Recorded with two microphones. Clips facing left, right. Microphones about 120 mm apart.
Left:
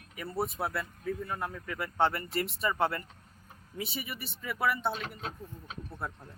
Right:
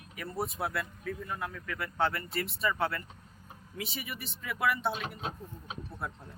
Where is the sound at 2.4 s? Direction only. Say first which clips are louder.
Left 1 dB; 40° left (ahead or behind).